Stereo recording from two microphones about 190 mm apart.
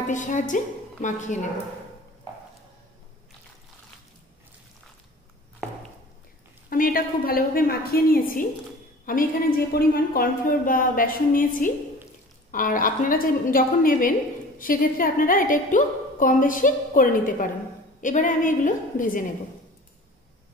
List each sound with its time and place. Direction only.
0.1 s a woman's voice: 40° left (ahead or behind)
6.7 s a woman's voice: 45° left (ahead or behind)